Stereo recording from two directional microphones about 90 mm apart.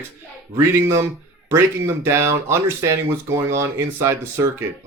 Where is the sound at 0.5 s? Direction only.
30° right (ahead or behind).